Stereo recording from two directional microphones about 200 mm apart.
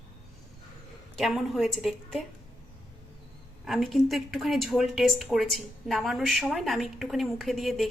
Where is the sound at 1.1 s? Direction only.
Centre (ahead or behind).